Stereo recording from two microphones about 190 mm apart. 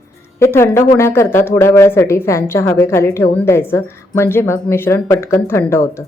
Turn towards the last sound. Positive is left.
turn(degrees=15)  # may be behind; listen again after turning